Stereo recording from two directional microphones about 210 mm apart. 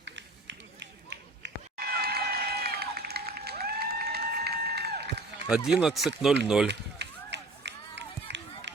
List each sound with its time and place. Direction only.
0.0 s run: 60° right (ahead or behind)
5.5 s speech: 5° right (ahead or behind)
6.7 s run: 55° right (ahead or behind)